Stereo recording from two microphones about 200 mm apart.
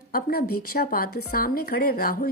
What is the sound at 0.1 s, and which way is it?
Speech, 50° left (ahead or behind).